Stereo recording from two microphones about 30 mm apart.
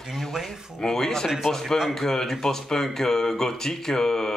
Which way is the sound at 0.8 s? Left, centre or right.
Centre.